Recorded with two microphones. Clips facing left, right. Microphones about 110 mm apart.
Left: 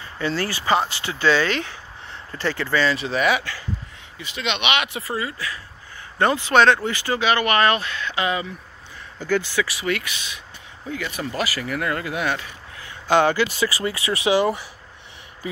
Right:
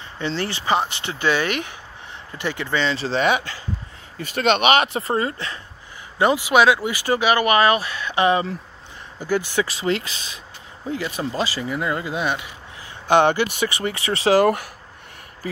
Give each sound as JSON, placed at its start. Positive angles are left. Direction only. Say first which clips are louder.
{"t": 0.0, "sound": "speech", "louder": "left 1 dB", "side_deg": -20}
{"t": 4.2, "sound": "speech", "louder": "right 8 dB", "side_deg": -45}
{"t": 6.1, "sound": "speech", "louder": "right 1 dB", "side_deg": -10}
{"t": 9.2, "sound": "speech", "louder": "even", "side_deg": -15}
{"t": 9.6, "sound": "speech", "louder": "right 2 dB", "side_deg": -25}
{"t": 14.3, "sound": "speech", "louder": "right 4 dB", "side_deg": -55}